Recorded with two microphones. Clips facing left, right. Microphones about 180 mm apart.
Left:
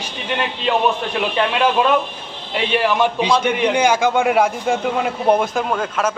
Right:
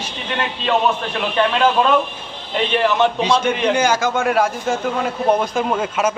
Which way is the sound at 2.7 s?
10° left (ahead or behind).